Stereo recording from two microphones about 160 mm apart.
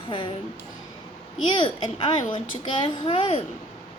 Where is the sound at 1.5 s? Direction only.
30° left (ahead or behind).